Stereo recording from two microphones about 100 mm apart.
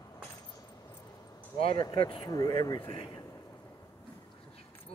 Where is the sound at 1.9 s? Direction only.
55° left (ahead or behind).